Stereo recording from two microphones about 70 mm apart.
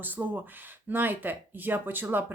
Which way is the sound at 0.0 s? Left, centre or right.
Right.